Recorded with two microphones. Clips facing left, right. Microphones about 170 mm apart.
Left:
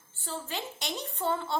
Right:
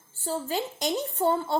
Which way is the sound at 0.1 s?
40° right (ahead or behind).